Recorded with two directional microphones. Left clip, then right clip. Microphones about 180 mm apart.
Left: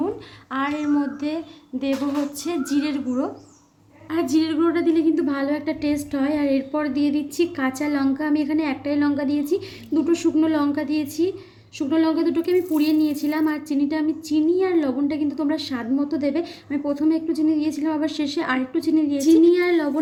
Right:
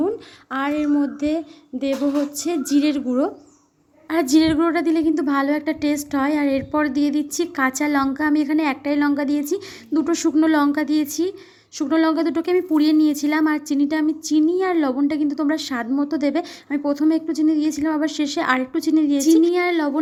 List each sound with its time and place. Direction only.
0.5 s a woman's voice: 30° right (ahead or behind)
4.1 s a woman's voice: 50° right (ahead or behind)